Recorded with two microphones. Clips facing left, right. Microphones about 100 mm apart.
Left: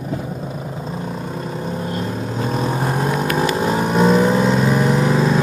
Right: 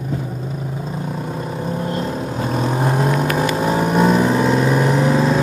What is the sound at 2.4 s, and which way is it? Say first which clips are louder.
Vehicle: even; 15° right (ahead or behind).